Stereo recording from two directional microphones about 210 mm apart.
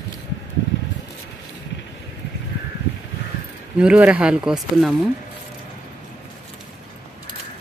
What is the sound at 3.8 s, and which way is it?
Speech, 5° right (ahead or behind).